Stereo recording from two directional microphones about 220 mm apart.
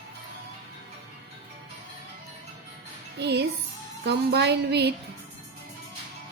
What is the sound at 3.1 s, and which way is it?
A child's voice, 50° right (ahead or behind).